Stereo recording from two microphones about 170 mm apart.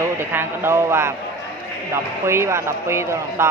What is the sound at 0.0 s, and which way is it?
A man's voice, 15° right (ahead or behind).